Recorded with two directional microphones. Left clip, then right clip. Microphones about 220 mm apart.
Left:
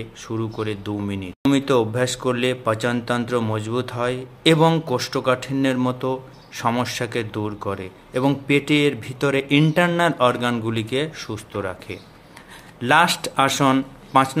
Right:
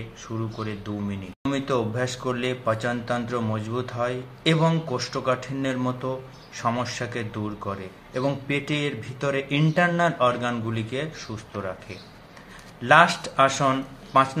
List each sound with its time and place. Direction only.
0.6 s speech: 55° left (ahead or behind)
12.8 s speech: 55° left (ahead or behind)